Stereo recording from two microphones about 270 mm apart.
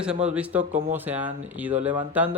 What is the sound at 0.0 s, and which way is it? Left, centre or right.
Speech, centre.